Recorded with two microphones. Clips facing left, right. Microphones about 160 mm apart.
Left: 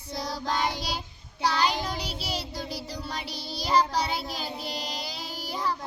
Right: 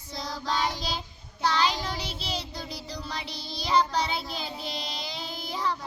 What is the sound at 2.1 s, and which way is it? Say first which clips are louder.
Child singing: left 1 dB; 10° left (ahead or behind).